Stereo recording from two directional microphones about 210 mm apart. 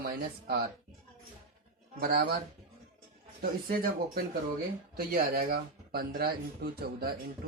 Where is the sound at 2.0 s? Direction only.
45° right (ahead or behind).